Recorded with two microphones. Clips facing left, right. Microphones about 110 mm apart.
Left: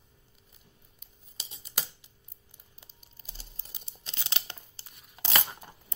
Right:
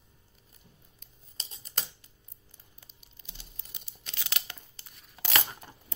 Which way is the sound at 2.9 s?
35° left (ahead or behind).